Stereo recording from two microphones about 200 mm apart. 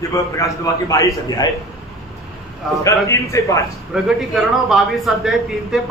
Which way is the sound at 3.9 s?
Centre (ahead or behind).